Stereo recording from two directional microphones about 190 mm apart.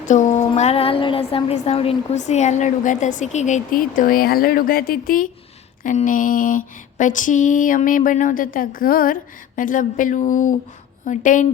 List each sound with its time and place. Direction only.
0.0 s a woman's voice: 40° left (ahead or behind)
5.8 s a sound: 40° left (ahead or behind)
11.0 s a woman's voice: 40° left (ahead or behind)